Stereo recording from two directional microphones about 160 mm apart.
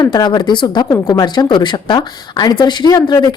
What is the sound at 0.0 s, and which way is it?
A woman's voice, 25° left (ahead or behind).